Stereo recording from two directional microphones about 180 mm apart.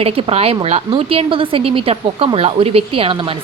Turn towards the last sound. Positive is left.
turn(degrees=-30)  # may be behind; listen again after turning